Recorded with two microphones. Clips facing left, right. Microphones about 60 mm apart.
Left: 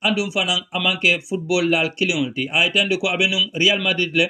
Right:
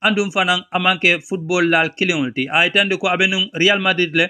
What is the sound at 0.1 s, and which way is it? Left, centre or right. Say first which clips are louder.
Speech: right 3 dB; right.